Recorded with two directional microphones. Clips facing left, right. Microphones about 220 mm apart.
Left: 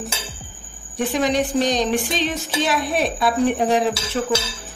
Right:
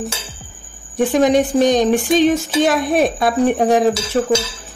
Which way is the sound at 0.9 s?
50° right (ahead or behind).